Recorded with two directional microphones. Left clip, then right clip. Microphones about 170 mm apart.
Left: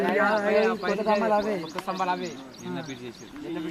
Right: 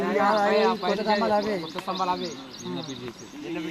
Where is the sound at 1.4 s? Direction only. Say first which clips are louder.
Even; 15° right (ahead or behind).